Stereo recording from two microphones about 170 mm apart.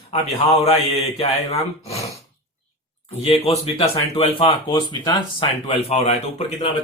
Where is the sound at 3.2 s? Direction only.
35° left (ahead or behind).